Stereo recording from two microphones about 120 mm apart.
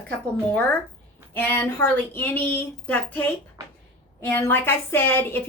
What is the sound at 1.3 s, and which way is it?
Speech, 20° left (ahead or behind).